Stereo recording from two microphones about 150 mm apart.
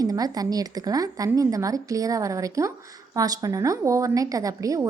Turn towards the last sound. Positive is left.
turn(degrees=-20)  # may be behind; listen again after turning